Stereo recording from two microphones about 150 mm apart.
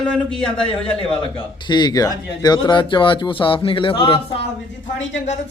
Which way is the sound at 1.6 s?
30° left (ahead or behind).